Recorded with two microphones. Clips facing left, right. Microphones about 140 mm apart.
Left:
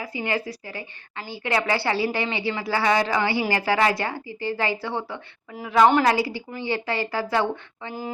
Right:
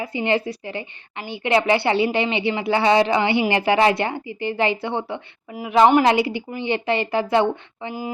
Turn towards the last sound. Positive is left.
turn(degrees=-20)  # may be behind; listen again after turning